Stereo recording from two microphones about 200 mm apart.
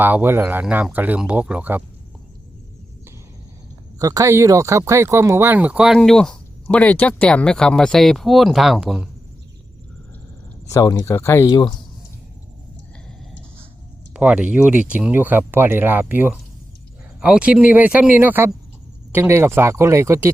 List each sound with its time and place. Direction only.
0.0 s speech: 10° right (ahead or behind)
3.9 s speech: 15° right (ahead or behind)
10.7 s speech: 20° left (ahead or behind)
14.1 s speech: 5° right (ahead or behind)